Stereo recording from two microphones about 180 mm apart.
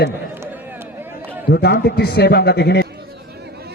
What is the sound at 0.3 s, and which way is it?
Run, 10° right (ahead or behind).